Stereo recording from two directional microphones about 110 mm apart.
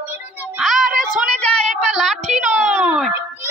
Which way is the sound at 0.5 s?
5° right (ahead or behind).